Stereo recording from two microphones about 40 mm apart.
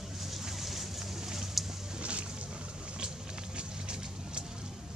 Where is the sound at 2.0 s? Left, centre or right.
Right.